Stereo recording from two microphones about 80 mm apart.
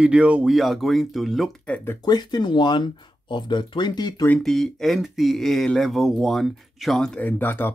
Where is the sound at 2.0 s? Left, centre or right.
Left.